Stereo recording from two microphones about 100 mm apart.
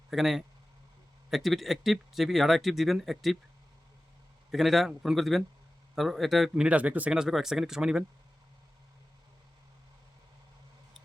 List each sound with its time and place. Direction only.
0.1 s speech: centre (ahead or behind)
4.5 s speech: centre (ahead or behind)
6.7 s speech: 15° right (ahead or behind)